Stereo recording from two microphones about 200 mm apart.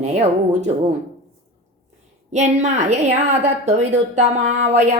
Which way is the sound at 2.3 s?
35° right (ahead or behind).